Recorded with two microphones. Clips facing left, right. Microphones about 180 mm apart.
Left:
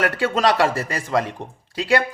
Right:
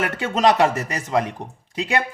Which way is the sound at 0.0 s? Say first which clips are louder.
Even; 20° right (ahead or behind).